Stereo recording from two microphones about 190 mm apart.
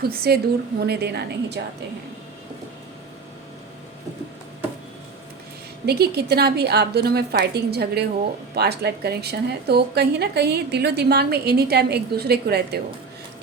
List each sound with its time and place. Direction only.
0.3 s a woman's voice: 55° right (ahead or behind)
5.8 s a woman's voice: 55° right (ahead or behind)